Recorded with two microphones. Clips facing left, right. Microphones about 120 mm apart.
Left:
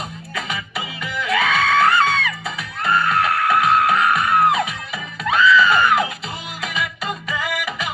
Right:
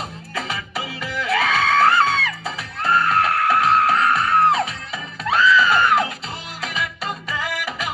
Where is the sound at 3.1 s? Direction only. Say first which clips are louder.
Even; 40° right (ahead or behind).